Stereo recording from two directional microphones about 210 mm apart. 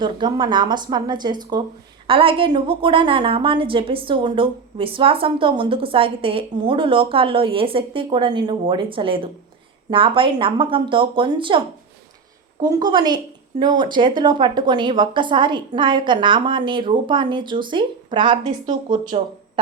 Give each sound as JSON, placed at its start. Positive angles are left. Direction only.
{"t": 0.0, "sound": "a woman's voice", "side_deg": -20}
{"t": 12.6, "sound": "a woman's voice", "side_deg": -20}